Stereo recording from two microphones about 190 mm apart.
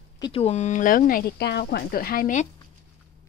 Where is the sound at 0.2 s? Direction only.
30° left (ahead or behind); by 2.4 s 45° left (ahead or behind).